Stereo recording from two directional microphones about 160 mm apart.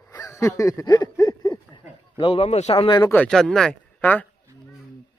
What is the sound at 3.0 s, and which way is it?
A man's voice, 10° left (ahead or behind).